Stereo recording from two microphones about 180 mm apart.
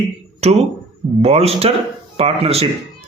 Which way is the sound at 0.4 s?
35° right (ahead or behind).